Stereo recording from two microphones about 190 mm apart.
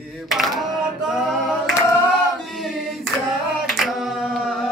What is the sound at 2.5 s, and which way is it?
Choir, centre (ahead or behind).